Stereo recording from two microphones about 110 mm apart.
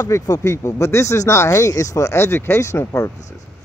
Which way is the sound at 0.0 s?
30° left (ahead or behind).